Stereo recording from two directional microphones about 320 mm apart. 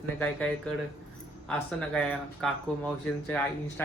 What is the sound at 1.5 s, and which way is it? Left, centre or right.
Speech, centre.